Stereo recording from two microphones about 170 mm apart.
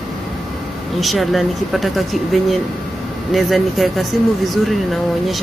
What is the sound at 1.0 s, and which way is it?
Speech, centre (ahead or behind).